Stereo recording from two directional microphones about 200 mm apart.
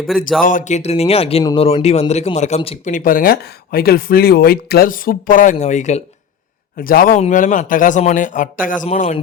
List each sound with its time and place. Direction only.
0.4 s speech: 40° left (ahead or behind)
6.7 s speech: 45° left (ahead or behind)